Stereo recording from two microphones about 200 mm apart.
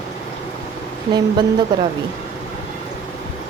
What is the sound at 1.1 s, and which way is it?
Speech, 25° right (ahead or behind).